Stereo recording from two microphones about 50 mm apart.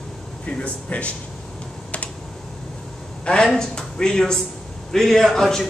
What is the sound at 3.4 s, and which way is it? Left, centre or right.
A man's voice, centre.